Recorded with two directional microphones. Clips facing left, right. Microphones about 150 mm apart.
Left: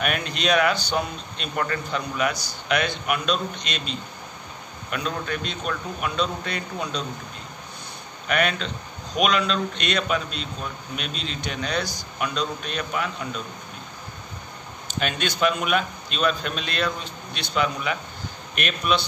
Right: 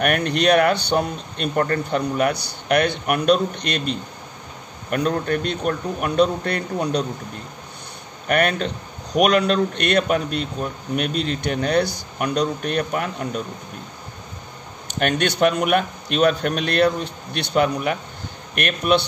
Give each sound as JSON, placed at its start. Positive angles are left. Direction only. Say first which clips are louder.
{"t": 0.0, "sound": "speech", "louder": "right 7 dB", "side_deg": -60}
{"t": 8.3, "sound": "speech", "louder": "right 4 dB", "side_deg": -50}
{"t": 15.0, "sound": "speech", "louder": "right 6 dB", "side_deg": -60}